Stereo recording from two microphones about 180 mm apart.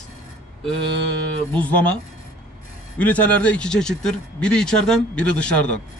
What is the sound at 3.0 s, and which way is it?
Speech, 10° left (ahead or behind).